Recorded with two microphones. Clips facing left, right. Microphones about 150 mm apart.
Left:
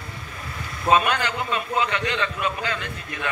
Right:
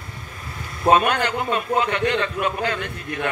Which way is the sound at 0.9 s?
50° right (ahead or behind).